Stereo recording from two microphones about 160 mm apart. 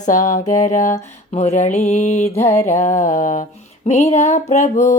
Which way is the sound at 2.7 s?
50° left (ahead or behind).